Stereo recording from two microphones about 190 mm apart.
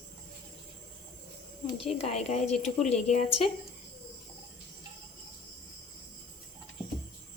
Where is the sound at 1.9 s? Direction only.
35° left (ahead or behind).